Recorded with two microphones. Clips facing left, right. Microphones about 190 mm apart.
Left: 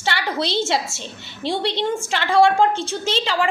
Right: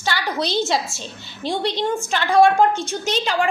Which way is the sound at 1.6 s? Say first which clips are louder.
Even; 25° left (ahead or behind).